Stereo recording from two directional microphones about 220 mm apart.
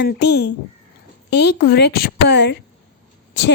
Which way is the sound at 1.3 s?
50° left (ahead or behind).